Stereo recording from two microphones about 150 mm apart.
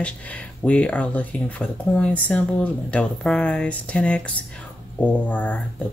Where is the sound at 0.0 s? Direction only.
10° left (ahead or behind).